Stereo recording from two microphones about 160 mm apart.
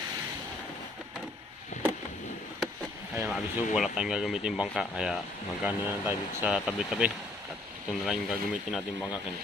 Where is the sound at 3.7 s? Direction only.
5° right (ahead or behind).